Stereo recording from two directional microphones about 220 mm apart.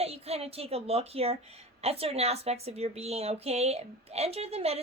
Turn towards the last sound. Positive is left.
turn(degrees=-30)  # may be behind; listen again after turning